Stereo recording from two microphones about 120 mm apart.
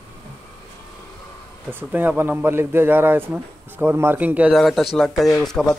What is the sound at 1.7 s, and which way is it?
A man's voice, 15° right (ahead or behind).